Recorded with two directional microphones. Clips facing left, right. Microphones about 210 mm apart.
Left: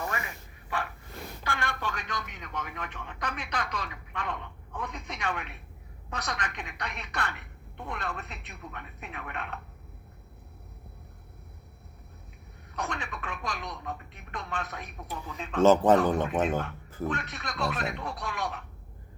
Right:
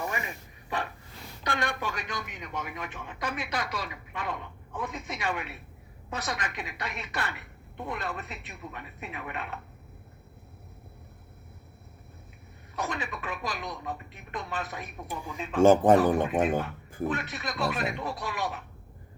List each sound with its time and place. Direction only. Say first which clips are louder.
0.0 s a sound: right 1 dB; 15° right (ahead or behind)
1.5 s speech: right 3 dB; 15° right (ahead or behind)
12.7 s speech: right 2 dB; 5° right (ahead or behind)
15.0 s speech: right 2 dB; 10° right (ahead or behind)